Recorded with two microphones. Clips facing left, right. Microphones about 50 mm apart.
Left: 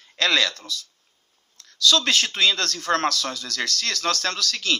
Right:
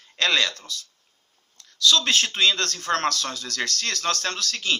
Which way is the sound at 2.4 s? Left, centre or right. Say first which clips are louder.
Even; right.